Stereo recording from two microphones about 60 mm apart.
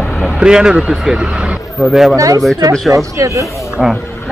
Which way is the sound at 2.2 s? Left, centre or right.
Right.